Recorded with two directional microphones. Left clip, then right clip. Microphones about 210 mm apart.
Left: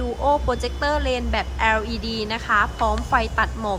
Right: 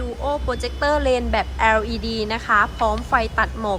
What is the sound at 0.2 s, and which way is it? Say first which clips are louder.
A woman's voice: left 4 dB; 15° left (ahead or behind).